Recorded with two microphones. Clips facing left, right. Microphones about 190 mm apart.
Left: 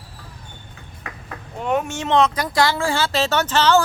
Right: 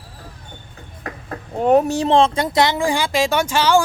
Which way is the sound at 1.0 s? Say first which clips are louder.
Right 6 dB; 40° right (ahead or behind).